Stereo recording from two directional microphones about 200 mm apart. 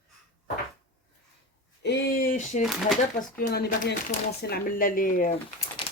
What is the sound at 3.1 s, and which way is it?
Speech, 45° left (ahead or behind).